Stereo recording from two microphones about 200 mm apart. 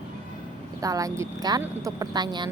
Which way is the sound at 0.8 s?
15° right (ahead or behind).